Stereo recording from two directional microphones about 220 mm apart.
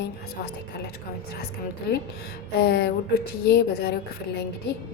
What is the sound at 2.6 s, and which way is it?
A woman's voice, 50° left (ahead or behind).